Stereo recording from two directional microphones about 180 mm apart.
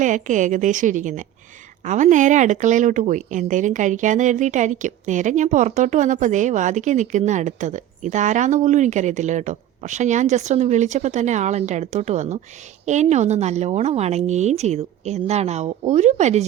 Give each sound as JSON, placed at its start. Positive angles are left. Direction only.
{"t": 0.0, "sound": "speech", "side_deg": -45}